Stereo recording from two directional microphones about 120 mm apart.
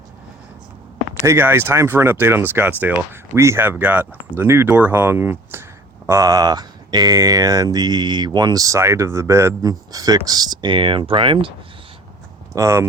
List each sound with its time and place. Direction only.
1.2 s speech: 20° right (ahead or behind); by 11.5 s 45° right (ahead or behind)
12.5 s speech: 25° right (ahead or behind)